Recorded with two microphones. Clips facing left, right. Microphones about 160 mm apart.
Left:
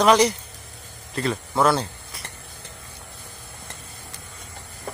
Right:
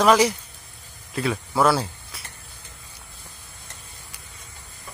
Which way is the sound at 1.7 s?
5° right (ahead or behind).